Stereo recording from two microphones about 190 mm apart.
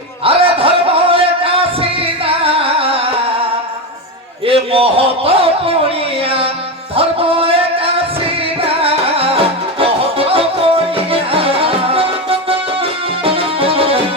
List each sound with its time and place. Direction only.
0.3 s music: 30° right (ahead or behind)
4.4 s a sound: 30° right (ahead or behind)
6.9 s music: 30° right (ahead or behind)